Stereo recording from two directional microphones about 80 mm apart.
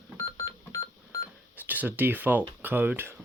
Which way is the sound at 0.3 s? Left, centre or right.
Left.